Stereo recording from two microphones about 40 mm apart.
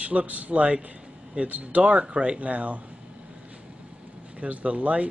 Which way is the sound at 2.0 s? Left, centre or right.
Right.